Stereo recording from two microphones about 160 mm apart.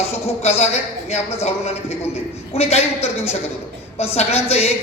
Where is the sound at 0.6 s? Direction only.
40° left (ahead or behind).